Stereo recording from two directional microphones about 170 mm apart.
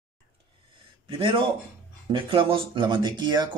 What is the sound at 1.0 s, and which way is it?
A man's voice, 30° right (ahead or behind).